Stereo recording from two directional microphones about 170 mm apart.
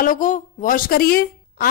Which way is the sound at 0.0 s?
50° left (ahead or behind).